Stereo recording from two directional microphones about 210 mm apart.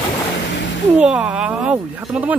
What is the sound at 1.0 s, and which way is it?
Speech, 5° right (ahead or behind).